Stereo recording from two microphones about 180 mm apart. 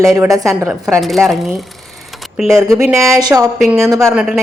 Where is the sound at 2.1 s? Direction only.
Centre (ahead or behind).